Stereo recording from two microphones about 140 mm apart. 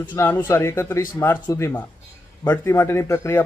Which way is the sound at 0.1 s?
15° left (ahead or behind).